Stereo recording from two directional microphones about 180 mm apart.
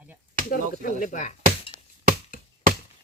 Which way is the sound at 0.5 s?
50° left (ahead or behind).